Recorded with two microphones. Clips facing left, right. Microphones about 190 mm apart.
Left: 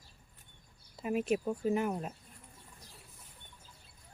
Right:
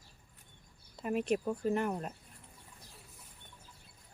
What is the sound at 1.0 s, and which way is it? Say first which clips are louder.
Speech: left 1 dB; 5° left (ahead or behind).